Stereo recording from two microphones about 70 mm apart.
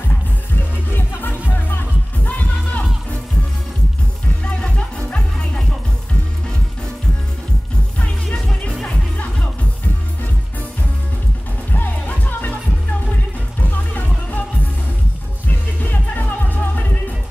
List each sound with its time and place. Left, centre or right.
0.9 s music: left
4.6 s music: centre
8.8 s music: centre
11.7 s music: left
13.6 s music: left
15.4 s music: left